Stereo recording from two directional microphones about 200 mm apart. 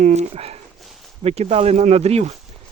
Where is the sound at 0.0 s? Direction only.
35° right (ahead or behind).